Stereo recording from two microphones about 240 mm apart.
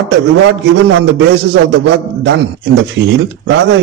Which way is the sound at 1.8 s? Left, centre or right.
Right.